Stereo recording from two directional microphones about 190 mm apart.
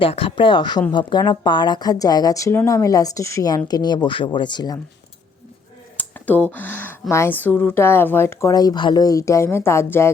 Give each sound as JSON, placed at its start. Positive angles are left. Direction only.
{"t": 0.0, "sound": "speech", "side_deg": 30}
{"t": 6.0, "sound": "speech", "side_deg": 10}